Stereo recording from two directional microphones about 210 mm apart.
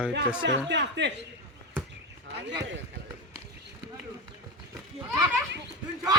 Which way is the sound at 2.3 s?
55° right (ahead or behind).